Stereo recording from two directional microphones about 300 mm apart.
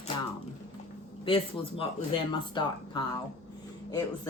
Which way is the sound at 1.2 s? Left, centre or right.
Centre.